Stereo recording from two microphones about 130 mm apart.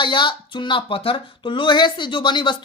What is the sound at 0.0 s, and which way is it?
Speech, 35° left (ahead or behind).